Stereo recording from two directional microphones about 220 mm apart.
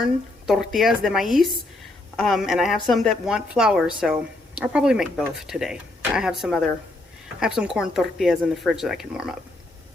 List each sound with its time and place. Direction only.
0.0 s a woman's voice: centre (ahead or behind)